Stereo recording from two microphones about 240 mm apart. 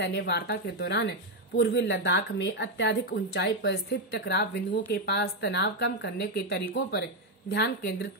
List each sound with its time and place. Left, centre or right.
0.0 s a woman's voice: left